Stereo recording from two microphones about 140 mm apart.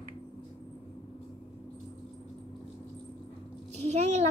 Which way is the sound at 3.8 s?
55° right (ahead or behind).